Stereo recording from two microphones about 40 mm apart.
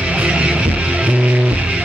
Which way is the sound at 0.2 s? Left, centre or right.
Right.